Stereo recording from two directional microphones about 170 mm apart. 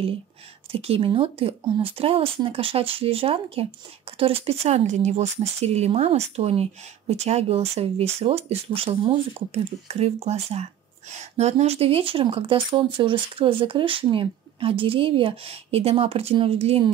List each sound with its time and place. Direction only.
0.7 s speech: 35° right (ahead or behind)